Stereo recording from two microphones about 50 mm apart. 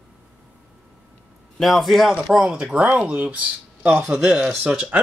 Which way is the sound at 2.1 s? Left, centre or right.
Centre.